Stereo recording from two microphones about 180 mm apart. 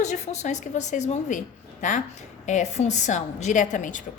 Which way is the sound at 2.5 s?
40° left (ahead or behind).